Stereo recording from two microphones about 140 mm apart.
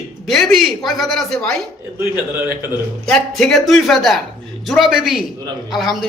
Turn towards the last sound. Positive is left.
turn(degrees=0)  # may be behind; listen again after turning